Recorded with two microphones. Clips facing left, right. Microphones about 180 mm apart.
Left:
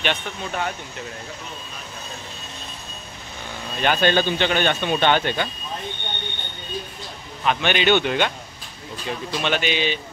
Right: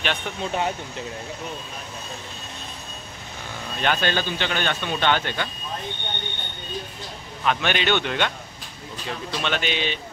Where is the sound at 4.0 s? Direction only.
20° left (ahead or behind).